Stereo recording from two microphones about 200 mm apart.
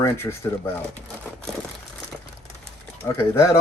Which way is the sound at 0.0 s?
15° left (ahead or behind).